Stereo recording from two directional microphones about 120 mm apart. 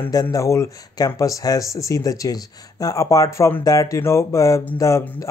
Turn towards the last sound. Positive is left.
turn(degrees=25)  # may be behind; listen again after turning